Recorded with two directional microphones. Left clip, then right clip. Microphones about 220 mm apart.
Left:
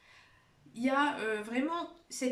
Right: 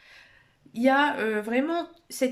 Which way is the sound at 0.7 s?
45° right (ahead or behind).